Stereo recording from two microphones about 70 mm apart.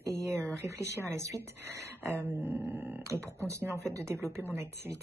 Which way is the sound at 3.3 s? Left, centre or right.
Right.